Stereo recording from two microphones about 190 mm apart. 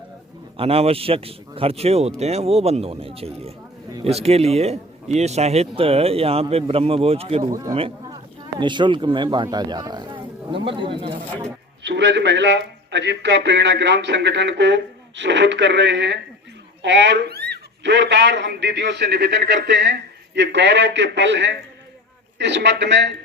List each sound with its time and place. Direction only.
0.5 s a man's voice: 30° right (ahead or behind)
8.5 s speech: 25° right (ahead or behind)
11.8 s a man's voice: 65° right (ahead or behind)